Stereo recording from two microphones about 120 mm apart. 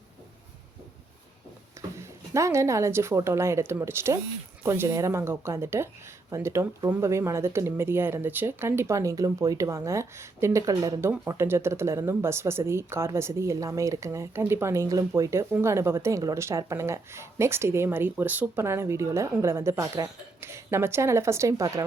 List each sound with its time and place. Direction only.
2.0 s speech: 25° right (ahead or behind)